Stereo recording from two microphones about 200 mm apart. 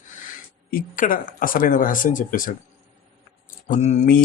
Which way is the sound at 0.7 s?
45° left (ahead or behind).